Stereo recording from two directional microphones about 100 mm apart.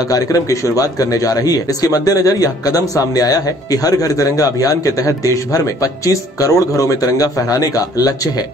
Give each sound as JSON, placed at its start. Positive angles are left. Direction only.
{"t": 0.1, "sound": "a man's voice", "side_deg": 35}